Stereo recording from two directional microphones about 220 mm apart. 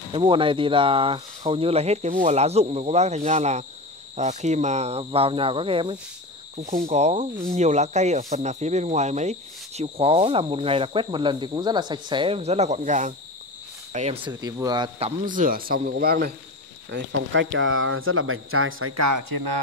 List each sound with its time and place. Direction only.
0.1 s speech: 25° right (ahead or behind); by 16.3 s 45° right (ahead or behind)
16.9 s speech: 55° right (ahead or behind)